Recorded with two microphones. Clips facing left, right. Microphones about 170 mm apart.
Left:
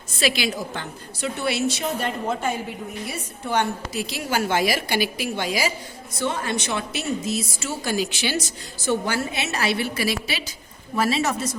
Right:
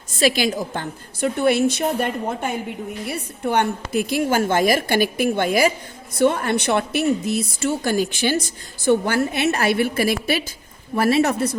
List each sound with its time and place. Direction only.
0.2 s a woman's voice: 45° right (ahead or behind)